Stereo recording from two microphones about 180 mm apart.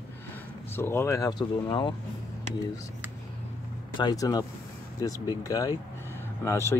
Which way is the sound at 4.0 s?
20° left (ahead or behind).